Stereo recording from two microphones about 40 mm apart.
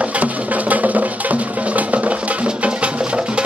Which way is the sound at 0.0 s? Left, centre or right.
Right.